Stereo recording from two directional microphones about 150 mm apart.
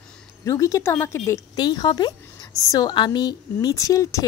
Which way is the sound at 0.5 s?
20° left (ahead or behind).